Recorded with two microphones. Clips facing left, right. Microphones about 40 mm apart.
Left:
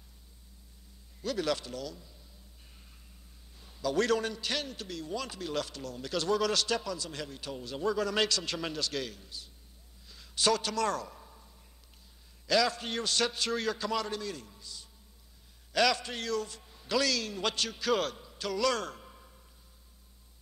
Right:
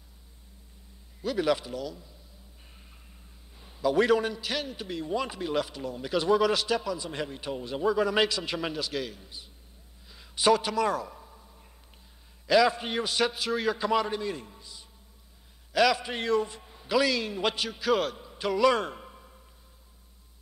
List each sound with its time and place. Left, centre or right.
1.2 s a man's voice: centre
3.5 s a man's voice: centre
4.8 s a man's voice: right
7.0 s a man's voice: right
10.0 s a sound: centre
12.4 s a man's voice: centre
16.1 s a man's voice: right
18.3 s a man's voice: right
19.1 s a sound: centre